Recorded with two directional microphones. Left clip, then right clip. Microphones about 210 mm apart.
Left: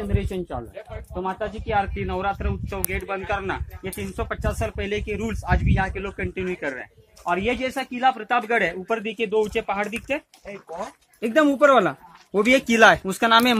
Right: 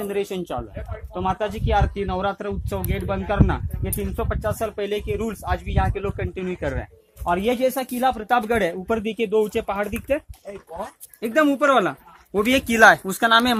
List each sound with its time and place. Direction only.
0.1 s speech: 55° right (ahead or behind)
11.1 s speech: 25° left (ahead or behind)